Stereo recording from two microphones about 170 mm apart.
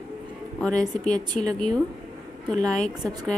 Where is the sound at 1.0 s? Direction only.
5° left (ahead or behind).